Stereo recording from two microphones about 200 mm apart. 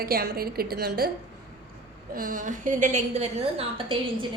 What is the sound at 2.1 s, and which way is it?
A woman's voice, 40° right (ahead or behind).